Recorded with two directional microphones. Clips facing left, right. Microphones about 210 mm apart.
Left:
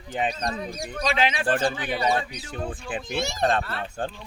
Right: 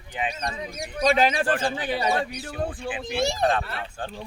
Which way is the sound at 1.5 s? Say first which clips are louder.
Left 1 dB; 35° left (ahead or behind).